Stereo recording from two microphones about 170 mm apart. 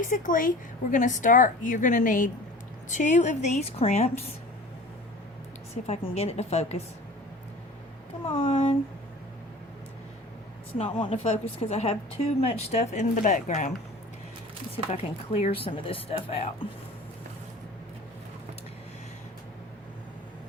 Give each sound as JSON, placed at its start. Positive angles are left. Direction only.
{"t": 0.0, "sound": "a woman's voice", "side_deg": 50}
{"t": 5.9, "sound": "a woman's voice", "side_deg": 40}
{"t": 8.2, "sound": "a woman's voice", "side_deg": 30}
{"t": 10.8, "sound": "a woman's voice", "side_deg": 35}
{"t": 14.8, "sound": "a woman's voice", "side_deg": 35}